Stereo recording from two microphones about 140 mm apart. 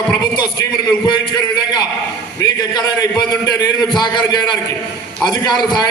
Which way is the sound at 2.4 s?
25° left (ahead or behind).